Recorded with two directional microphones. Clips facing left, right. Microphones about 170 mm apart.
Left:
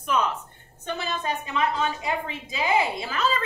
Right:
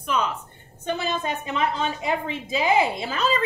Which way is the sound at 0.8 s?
25° right (ahead or behind).